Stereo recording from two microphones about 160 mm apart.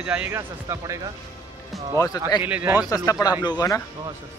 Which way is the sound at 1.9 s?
20° left (ahead or behind).